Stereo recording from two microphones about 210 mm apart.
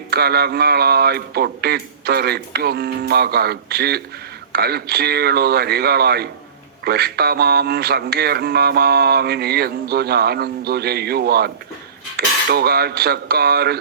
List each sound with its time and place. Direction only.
0.1 s speech: 50° right (ahead or behind)
12.1 s cutlery: 50° right (ahead or behind)